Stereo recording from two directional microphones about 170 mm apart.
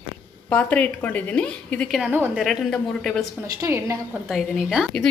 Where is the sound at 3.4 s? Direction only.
15° right (ahead or behind).